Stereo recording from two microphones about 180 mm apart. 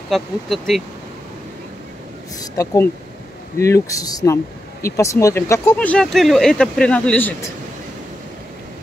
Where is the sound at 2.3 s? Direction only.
20° left (ahead or behind).